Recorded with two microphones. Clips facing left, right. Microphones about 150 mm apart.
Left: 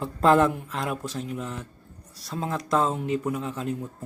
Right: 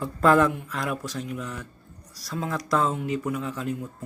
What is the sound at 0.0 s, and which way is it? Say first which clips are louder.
Speech: even; 25° left (ahead or behind).